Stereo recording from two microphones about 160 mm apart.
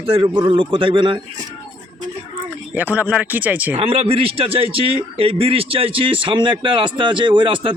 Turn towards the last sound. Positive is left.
turn(degrees=-30)  # may be behind; listen again after turning